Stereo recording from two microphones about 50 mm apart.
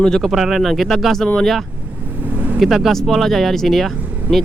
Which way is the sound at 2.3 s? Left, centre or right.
Right.